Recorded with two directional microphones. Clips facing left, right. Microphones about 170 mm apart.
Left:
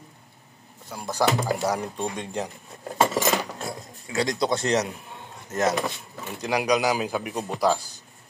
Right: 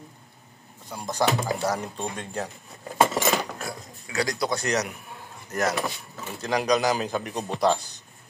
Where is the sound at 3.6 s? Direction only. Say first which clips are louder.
Left 1 dB; 25° left (ahead or behind).